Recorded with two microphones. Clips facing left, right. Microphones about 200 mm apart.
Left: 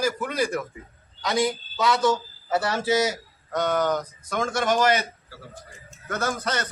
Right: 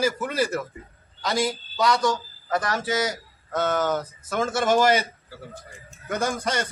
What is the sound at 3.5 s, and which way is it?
A man's voice, 5° right (ahead or behind).